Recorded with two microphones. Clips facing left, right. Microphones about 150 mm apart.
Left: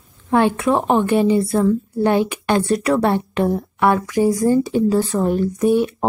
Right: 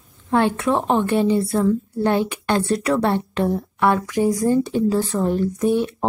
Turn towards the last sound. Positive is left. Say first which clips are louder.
# left 3 dB
turn(degrees=10)  # may be behind; listen again after turning